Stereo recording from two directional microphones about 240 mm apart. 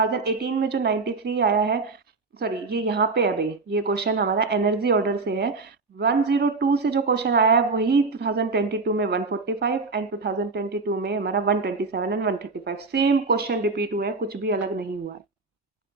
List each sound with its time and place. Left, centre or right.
0.0 s a woman's voice: right